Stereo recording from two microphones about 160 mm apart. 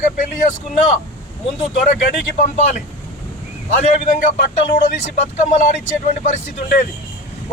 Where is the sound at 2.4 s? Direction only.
45° left (ahead or behind).